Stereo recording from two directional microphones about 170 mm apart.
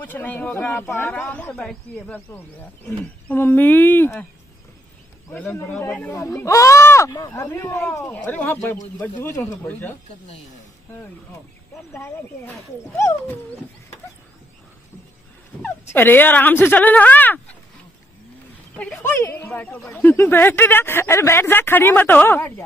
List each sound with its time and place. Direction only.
0.0 s speech: 10° left (ahead or behind)
5.3 s speech: 10° left (ahead or behind)
11.9 s speech: 15° left (ahead or behind)
15.6 s speech: 10° left (ahead or behind)
18.8 s speech: centre (ahead or behind)
19.1 s speech: 15° left (ahead or behind)